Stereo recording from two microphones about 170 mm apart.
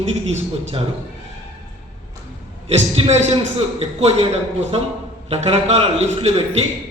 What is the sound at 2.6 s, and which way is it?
A man's voice, 40° right (ahead or behind).